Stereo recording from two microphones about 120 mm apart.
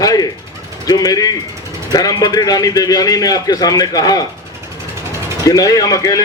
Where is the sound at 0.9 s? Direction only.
30° left (ahead or behind).